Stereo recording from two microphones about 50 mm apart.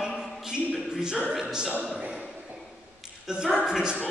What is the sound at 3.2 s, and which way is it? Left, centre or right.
Speech, centre.